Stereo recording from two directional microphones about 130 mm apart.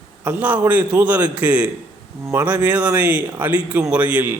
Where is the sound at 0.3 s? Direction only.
10° right (ahead or behind).